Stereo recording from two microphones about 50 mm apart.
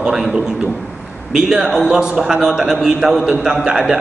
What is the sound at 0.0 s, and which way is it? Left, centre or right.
Speech, centre.